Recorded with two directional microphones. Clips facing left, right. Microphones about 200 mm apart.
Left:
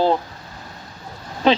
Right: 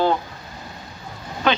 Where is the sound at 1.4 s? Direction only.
30° left (ahead or behind).